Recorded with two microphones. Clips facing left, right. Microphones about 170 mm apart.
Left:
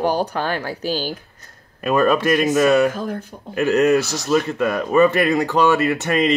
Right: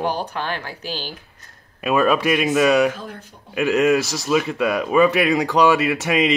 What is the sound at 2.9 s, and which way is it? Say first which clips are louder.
Speech: left 5 dB; 45° left (ahead or behind).